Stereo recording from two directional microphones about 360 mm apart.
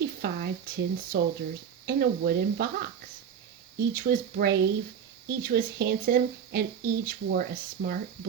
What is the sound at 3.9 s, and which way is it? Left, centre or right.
Speech, right.